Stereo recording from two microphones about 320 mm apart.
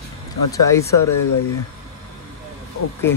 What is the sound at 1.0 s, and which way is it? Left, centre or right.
Speech, left.